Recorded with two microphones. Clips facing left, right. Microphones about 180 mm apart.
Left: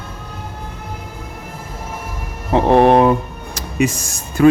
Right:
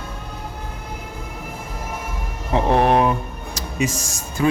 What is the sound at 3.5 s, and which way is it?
Speech, 60° left (ahead or behind).